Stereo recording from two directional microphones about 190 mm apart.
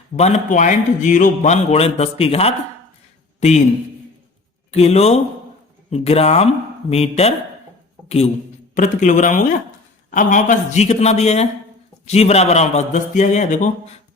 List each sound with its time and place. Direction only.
0.2 s speech: 35° left (ahead or behind)
4.7 s a man's voice: 35° left (ahead or behind)